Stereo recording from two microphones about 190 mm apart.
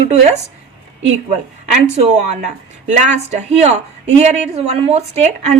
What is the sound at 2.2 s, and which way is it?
A woman's voice, 35° right (ahead or behind).